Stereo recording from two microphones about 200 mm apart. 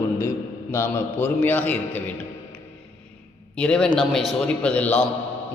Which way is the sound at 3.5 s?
5° left (ahead or behind).